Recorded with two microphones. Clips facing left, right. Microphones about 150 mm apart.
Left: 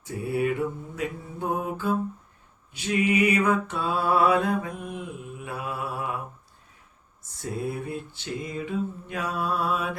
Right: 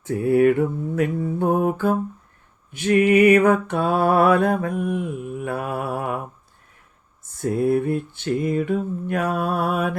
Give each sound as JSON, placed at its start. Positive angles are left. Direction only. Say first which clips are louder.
{"t": 0.1, "sound": "mantra", "louder": "right 10 dB", "side_deg": -55}
{"t": 7.4, "sound": "mantra", "louder": "right 11 dB", "side_deg": -55}